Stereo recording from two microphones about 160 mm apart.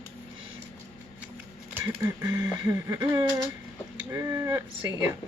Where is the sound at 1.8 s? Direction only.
25° right (ahead or behind).